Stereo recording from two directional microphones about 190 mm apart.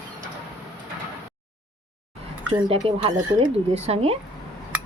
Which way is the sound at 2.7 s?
30° right (ahead or behind).